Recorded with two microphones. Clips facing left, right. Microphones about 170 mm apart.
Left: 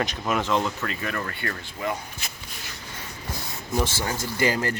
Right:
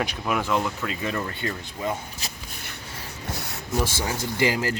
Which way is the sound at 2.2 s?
35° right (ahead or behind).